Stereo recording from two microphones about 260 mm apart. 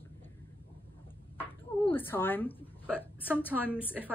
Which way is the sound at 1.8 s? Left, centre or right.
Centre.